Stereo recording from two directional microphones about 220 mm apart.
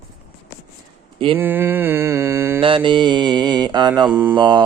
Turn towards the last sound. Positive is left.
turn(degrees=-20)  # may be behind; listen again after turning